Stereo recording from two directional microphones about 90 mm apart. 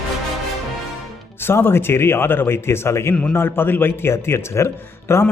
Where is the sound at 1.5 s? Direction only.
25° left (ahead or behind).